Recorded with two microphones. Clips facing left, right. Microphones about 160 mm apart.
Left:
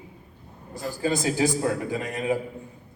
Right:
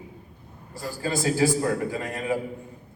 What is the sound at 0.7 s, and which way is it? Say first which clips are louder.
A man's voice: left 3 dB; 20° left (ahead or behind).